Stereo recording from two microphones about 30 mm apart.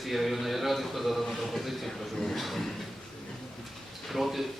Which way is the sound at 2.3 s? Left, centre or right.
Centre.